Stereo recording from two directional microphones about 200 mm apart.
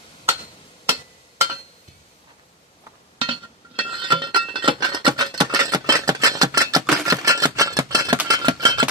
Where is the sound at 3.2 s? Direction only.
25° right (ahead or behind).